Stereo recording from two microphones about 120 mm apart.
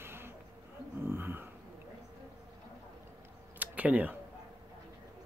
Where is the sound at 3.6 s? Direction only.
15° right (ahead or behind).